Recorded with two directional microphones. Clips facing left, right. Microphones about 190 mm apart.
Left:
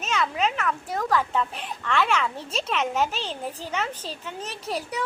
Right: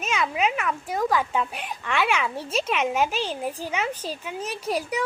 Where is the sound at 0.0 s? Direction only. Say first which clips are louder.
Right 1 dB; 10° right (ahead or behind).